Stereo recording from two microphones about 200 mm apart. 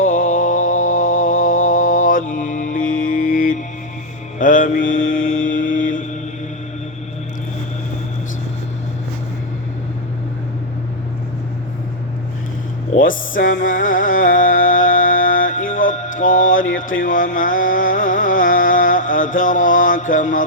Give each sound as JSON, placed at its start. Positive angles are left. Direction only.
{"t": 0.1, "sound": "mantra", "side_deg": 40}
{"t": 0.6, "sound": "mantra", "side_deg": 80}
{"t": 1.8, "sound": "mantra", "side_deg": 40}
{"t": 12.9, "sound": "music", "side_deg": 45}